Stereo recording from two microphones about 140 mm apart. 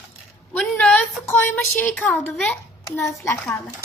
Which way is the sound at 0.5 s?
10° left (ahead or behind).